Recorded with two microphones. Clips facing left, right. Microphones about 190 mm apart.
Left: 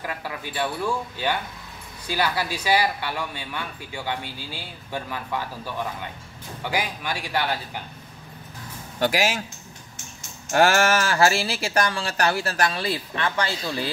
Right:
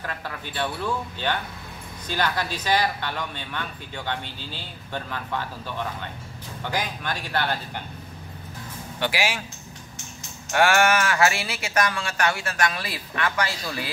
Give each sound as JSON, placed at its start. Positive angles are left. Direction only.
{"t": 0.0, "sound": "speech", "side_deg": 10}
{"t": 9.0, "sound": "speech", "side_deg": 45}
{"t": 10.5, "sound": "speech", "side_deg": 40}